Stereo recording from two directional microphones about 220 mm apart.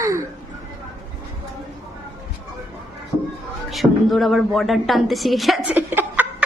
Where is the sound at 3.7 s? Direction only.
Centre (ahead or behind).